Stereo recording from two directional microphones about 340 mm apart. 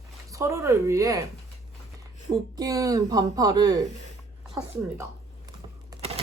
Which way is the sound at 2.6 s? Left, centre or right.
Centre.